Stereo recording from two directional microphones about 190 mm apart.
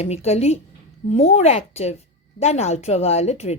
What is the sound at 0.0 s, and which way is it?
A woman's voice, 35° left (ahead or behind).